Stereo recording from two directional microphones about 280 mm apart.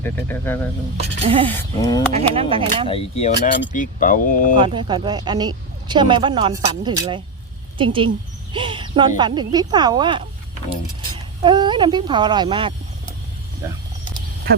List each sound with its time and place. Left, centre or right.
0.0 s speech: centre
1.2 s speech: centre
1.5 s speech: centre
2.1 s speech: right
2.8 s speech: left
4.6 s speech: centre
11.4 s speech: centre